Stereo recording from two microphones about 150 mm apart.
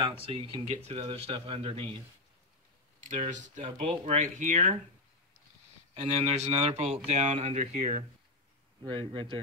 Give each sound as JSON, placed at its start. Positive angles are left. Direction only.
{"t": 0.2, "sound": "a man's voice", "side_deg": -35}
{"t": 3.3, "sound": "speech", "side_deg": -55}
{"t": 3.6, "sound": "a man's voice", "side_deg": -40}
{"t": 4.2, "sound": "speech", "side_deg": -55}
{"t": 5.9, "sound": "speech", "side_deg": -45}
{"t": 8.8, "sound": "a man's voice", "side_deg": -30}